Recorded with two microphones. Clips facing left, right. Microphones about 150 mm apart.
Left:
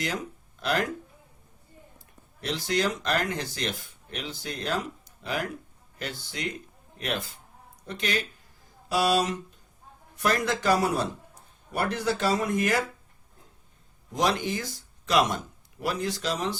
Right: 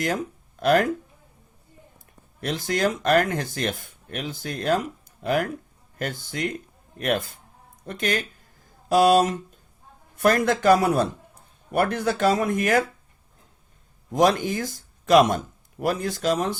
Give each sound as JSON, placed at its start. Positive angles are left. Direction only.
{"t": 0.6, "sound": "speech", "side_deg": -50}
{"t": 2.4, "sound": "speech", "side_deg": -50}
{"t": 14.1, "sound": "speech", "side_deg": -50}